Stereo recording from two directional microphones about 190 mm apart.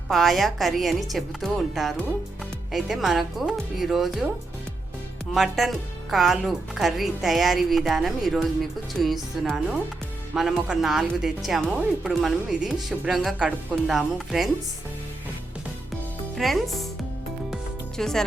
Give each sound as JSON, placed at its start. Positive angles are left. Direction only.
{"t": 0.1, "sound": "speech", "side_deg": 0}
{"t": 5.3, "sound": "speech", "side_deg": 0}
{"t": 16.3, "sound": "speech", "side_deg": 0}
{"t": 17.5, "sound": "music", "side_deg": 5}